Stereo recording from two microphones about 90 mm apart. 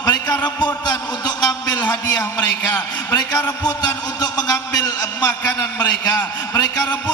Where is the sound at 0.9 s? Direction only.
50° left (ahead or behind).